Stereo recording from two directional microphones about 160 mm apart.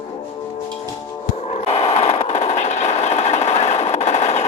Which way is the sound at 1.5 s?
45° left (ahead or behind).